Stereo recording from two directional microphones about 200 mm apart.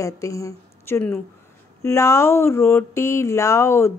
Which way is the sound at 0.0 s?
15° left (ahead or behind).